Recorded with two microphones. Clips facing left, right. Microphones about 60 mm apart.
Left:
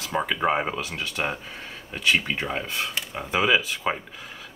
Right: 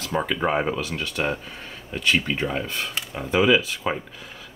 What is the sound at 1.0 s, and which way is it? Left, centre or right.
Speech, centre.